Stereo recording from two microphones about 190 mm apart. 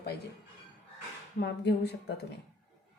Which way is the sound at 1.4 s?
65° left (ahead or behind).